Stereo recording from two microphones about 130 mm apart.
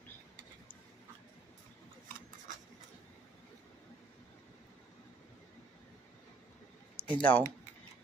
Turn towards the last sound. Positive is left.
turn(degrees=10)  # may be behind; listen again after turning